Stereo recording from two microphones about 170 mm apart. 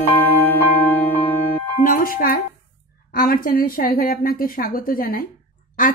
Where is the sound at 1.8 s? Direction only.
55° left (ahead or behind).